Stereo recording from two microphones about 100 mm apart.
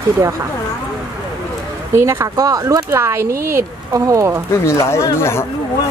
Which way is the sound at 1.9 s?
30° right (ahead or behind).